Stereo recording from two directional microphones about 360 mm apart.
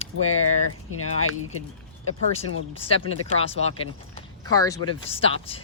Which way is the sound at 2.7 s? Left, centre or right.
Centre.